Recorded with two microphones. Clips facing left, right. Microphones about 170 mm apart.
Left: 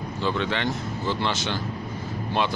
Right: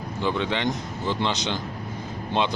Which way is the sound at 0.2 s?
15° right (ahead or behind).